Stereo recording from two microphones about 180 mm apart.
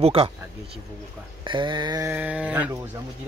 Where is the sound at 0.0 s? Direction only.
35° right (ahead or behind).